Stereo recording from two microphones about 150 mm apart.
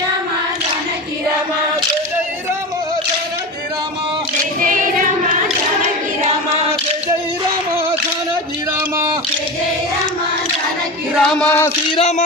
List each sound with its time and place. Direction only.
4.6 s child singing: 65° right (ahead or behind)
11.1 s choir: centre (ahead or behind)
11.9 s speech: 40° left (ahead or behind)